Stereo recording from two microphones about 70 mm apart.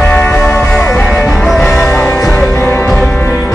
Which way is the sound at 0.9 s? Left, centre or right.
Centre.